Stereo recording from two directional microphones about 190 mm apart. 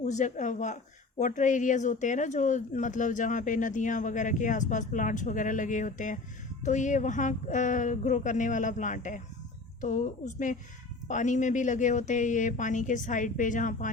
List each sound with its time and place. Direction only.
0.0 s speech: 40° left (ahead or behind)